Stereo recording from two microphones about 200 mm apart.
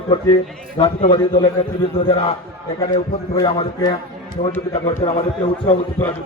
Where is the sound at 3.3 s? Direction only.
20° left (ahead or behind).